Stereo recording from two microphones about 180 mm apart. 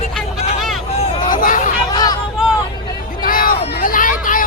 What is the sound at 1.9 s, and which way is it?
Hubbub, 20° left (ahead or behind).